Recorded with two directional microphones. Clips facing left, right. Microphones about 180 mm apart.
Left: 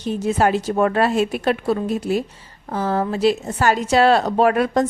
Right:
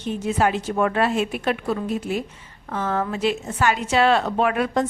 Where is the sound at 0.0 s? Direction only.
40° left (ahead or behind).